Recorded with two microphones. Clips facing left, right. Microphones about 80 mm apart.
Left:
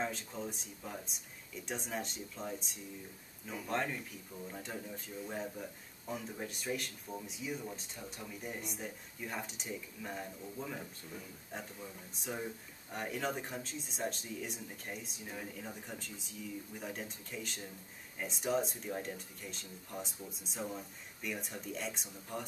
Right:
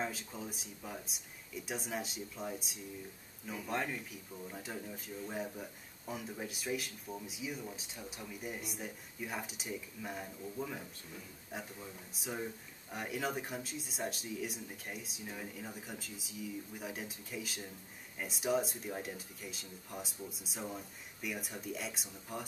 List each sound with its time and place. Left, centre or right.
0.0 s speech: centre